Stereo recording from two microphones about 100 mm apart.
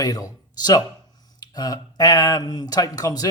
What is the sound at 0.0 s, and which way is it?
Speech, 40° left (ahead or behind).